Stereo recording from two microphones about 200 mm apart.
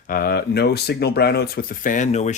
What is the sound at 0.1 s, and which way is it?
Speech, 50° left (ahead or behind).